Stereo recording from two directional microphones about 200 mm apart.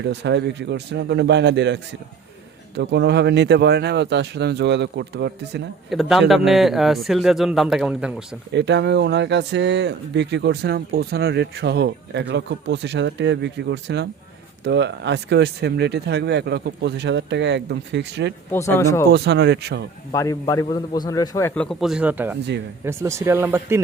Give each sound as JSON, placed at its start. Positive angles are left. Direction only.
{"t": 0.0, "sound": "speech", "side_deg": -60}
{"t": 5.9, "sound": "a man's voice", "side_deg": 0}
{"t": 8.5, "sound": "speech", "side_deg": -60}
{"t": 18.5, "sound": "a man's voice", "side_deg": 15}
{"t": 19.1, "sound": "speech", "side_deg": -60}
{"t": 20.1, "sound": "a man's voice", "side_deg": 15}